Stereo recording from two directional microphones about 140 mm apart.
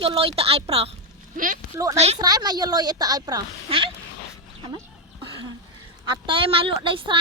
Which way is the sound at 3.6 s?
40° right (ahead or behind).